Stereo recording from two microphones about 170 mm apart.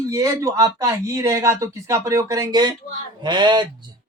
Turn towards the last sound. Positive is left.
turn(degrees=-25)  # may be behind; listen again after turning